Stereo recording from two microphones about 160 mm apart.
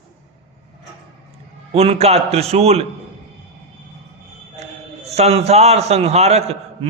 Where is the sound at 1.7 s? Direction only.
40° right (ahead or behind).